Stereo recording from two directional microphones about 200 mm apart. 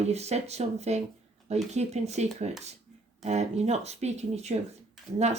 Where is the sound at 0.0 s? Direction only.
35° right (ahead or behind).